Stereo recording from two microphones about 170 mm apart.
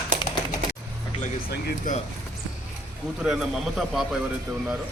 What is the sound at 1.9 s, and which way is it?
Speech, 50° left (ahead or behind).